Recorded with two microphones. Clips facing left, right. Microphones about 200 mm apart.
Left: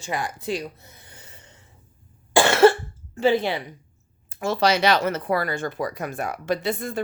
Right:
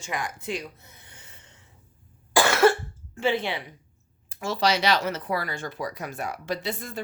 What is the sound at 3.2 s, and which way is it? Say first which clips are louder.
Speech: left 5 dB; 40° left (ahead or behind).